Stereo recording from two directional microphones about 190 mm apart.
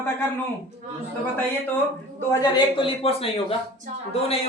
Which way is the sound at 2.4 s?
30° left (ahead or behind).